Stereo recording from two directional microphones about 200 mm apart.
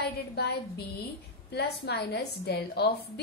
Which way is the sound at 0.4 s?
55° left (ahead or behind).